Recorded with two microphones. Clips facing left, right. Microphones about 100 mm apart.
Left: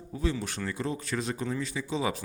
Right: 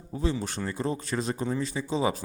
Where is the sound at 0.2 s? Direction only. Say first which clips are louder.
Right 2 dB; 30° right (ahead or behind).